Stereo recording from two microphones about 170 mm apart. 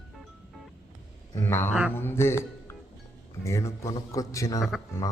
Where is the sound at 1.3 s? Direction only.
15° left (ahead or behind).